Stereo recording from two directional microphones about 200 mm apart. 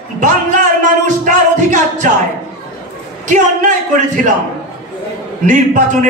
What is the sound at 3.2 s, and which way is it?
Music, 40° right (ahead or behind).